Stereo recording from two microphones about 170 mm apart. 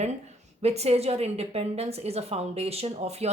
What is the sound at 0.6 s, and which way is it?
A woman's voice, 40° right (ahead or behind).